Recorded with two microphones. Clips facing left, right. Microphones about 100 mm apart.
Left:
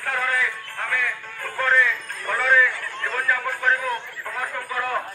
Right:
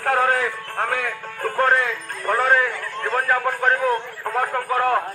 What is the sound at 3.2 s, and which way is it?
A man's voice, 45° right (ahead or behind).